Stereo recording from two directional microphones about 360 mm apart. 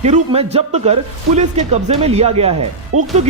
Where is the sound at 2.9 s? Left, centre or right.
Right.